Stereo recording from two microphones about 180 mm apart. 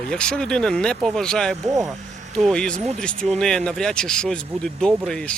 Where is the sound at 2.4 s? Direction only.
5° left (ahead or behind).